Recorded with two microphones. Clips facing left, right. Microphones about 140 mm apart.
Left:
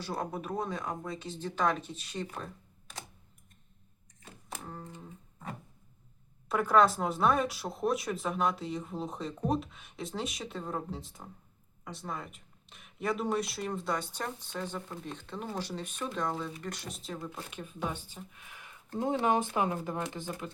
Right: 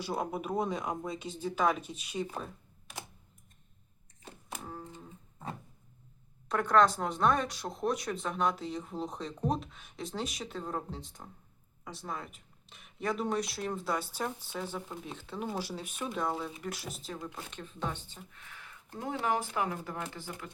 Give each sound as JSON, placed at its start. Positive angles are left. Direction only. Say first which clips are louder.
{"t": 0.0, "sound": "speech", "louder": "right 1 dB", "side_deg": -10}
{"t": 2.3, "sound": "a sound", "louder": "right 1 dB", "side_deg": -5}
{"t": 6.5, "sound": "speech", "louder": "left 1 dB", "side_deg": 5}